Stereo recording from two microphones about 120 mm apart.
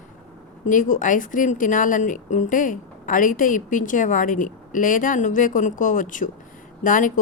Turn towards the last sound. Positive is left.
turn(degrees=90)